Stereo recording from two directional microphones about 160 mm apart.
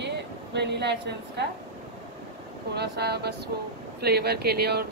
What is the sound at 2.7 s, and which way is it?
A woman's voice, 90° right.